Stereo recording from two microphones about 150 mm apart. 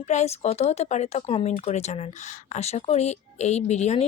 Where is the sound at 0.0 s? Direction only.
50° left (ahead or behind).